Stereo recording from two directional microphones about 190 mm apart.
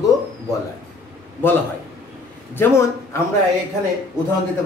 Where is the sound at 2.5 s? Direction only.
10° left (ahead or behind).